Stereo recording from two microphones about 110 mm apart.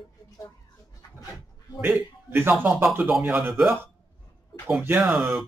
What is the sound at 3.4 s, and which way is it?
Speech, centre (ahead or behind).